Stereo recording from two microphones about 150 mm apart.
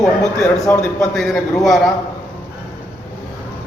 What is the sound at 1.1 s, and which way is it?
Speech, centre (ahead or behind).